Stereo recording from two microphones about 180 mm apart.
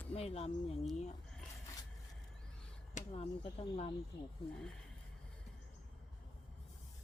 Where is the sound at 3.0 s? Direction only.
35° left (ahead or behind).